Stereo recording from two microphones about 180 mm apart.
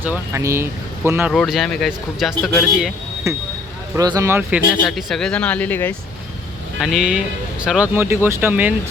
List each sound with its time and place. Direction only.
0.0 s speech: 15° right (ahead or behind)
1.3 s speech: centre (ahead or behind)
3.9 s speech: 20° right (ahead or behind)
4.8 s speech: centre (ahead or behind)
6.7 s speech: 5° right (ahead or behind)